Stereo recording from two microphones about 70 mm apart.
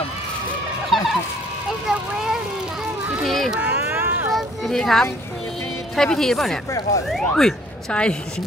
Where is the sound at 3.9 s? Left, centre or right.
Right.